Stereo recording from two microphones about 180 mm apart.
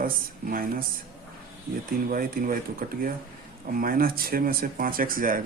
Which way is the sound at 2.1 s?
50° right (ahead or behind).